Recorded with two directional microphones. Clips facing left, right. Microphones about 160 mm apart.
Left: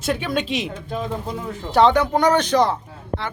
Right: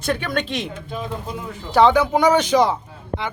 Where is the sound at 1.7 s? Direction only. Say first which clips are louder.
Right 1 dB; centre (ahead or behind).